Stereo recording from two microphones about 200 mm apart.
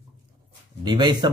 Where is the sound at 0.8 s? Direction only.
20° right (ahead or behind).